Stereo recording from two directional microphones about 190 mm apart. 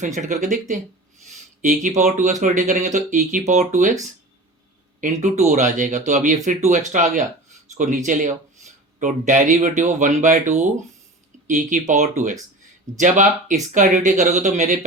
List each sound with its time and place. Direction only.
0.0 s speech: 40° right (ahead or behind)
1.6 s speech: 40° right (ahead or behind)
4.9 s speech: 40° right (ahead or behind)